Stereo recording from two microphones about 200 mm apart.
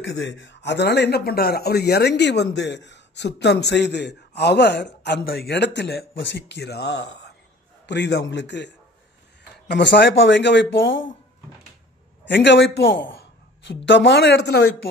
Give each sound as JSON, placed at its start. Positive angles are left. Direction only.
{"t": 0.0, "sound": "speech", "side_deg": 65}
{"t": 12.3, "sound": "speech", "side_deg": 60}